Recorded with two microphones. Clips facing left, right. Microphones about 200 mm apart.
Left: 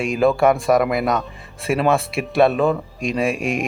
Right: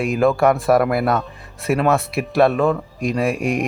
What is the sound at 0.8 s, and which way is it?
Speech, 15° left (ahead or behind).